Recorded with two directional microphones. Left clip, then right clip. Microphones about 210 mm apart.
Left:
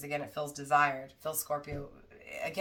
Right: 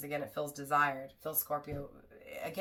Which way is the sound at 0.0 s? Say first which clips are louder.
Left 1 dB; 10° left (ahead or behind).